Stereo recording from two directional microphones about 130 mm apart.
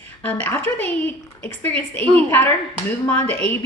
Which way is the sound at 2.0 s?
45° right (ahead or behind).